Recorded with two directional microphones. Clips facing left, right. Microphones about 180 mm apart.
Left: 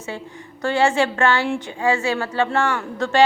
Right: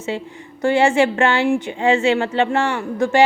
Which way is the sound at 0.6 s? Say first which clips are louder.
Right 4 dB; 20° right (ahead or behind).